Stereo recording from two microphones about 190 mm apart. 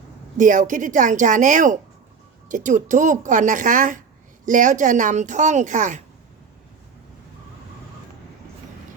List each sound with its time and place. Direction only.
0.3 s speech: 40° right (ahead or behind)